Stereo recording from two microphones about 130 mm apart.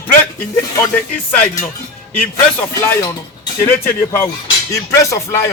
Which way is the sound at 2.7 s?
25° left (ahead or behind).